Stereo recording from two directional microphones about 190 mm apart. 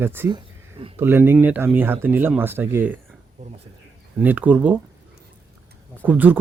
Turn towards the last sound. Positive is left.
turn(degrees=-10)  # may be behind; listen again after turning